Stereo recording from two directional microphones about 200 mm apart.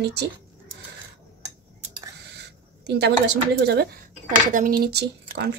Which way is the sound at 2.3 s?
55° right (ahead or behind).